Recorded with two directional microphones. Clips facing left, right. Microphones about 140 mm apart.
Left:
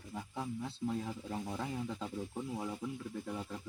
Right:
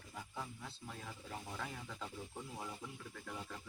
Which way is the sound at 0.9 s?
25° left (ahead or behind).